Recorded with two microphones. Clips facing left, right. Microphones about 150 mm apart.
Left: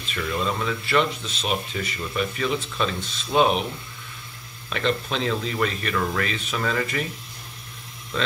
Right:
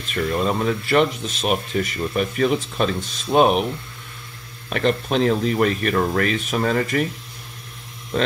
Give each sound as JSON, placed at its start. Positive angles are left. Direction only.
{"t": 0.1, "sound": "speech", "side_deg": -45}
{"t": 4.6, "sound": "speech", "side_deg": -45}